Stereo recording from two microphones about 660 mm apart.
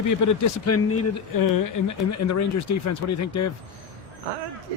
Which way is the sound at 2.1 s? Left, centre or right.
Left.